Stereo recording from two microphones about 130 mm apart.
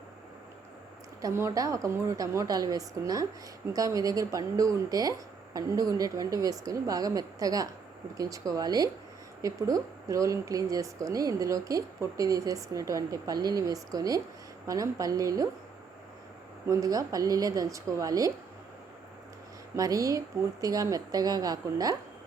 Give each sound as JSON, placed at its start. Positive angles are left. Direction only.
{"t": 1.2, "sound": "speech", "side_deg": -20}
{"t": 16.6, "sound": "speech", "side_deg": -25}
{"t": 19.7, "sound": "speech", "side_deg": -25}